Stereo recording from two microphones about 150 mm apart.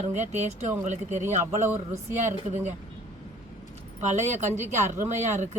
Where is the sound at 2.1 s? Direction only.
50° right (ahead or behind).